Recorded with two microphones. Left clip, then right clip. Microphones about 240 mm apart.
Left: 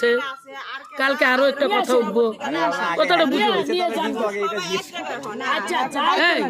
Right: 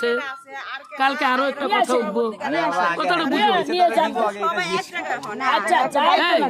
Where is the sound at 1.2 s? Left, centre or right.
Centre.